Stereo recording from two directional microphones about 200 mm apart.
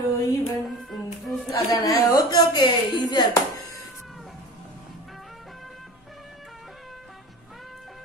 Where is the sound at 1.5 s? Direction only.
15° left (ahead or behind).